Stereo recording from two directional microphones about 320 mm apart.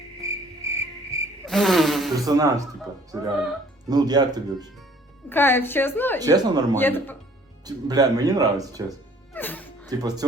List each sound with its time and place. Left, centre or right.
0.2 s music: centre
0.6 s cricket: centre
1.5 s insect: centre
2.1 s speech: centre
5.3 s a woman's voice: centre
6.1 s speech: centre
6.7 s a woman's voice: centre
7.6 s speech: centre
9.3 s music: centre
9.9 s speech: centre